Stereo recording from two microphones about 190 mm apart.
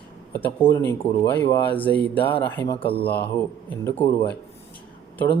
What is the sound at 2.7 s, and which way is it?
Speech, 30° left (ahead or behind).